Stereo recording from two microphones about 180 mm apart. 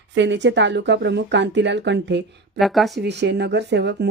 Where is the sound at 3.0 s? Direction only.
70° right (ahead or behind).